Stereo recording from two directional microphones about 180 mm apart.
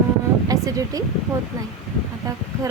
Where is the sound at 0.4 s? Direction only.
20° right (ahead or behind).